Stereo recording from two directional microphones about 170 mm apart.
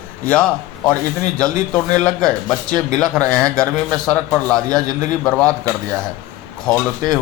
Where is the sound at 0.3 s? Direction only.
5° left (ahead or behind).